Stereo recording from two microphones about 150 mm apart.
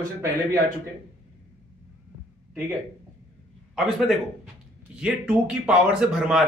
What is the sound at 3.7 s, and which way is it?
Speech, centre (ahead or behind).